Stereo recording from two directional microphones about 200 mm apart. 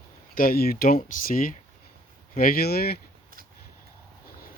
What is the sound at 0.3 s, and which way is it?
Speech, 45° left (ahead or behind).